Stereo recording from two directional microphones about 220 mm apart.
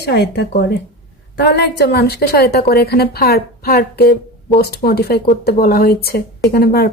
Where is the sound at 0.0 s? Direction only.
50° left (ahead or behind).